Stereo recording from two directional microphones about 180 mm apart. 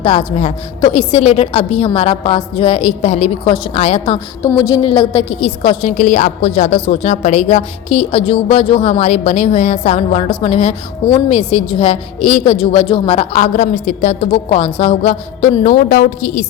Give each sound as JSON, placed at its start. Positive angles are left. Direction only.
{"t": 0.0, "sound": "a woman's voice", "side_deg": 30}